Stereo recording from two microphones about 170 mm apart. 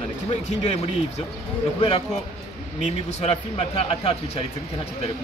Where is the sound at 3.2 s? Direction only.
35° left (ahead or behind).